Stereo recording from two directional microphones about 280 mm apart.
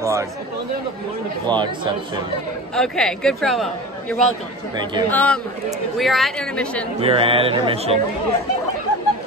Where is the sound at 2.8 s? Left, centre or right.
Centre.